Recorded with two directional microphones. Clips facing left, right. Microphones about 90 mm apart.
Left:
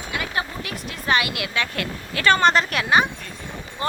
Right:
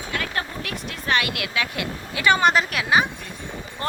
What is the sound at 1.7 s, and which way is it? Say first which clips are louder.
A woman's voice: left 1 dB; 15° right (ahead or behind).